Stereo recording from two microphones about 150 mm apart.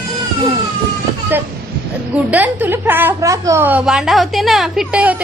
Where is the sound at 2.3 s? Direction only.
10° right (ahead or behind).